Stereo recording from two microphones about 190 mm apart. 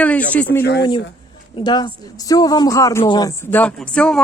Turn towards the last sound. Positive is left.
turn(degrees=5)  # may be behind; listen again after turning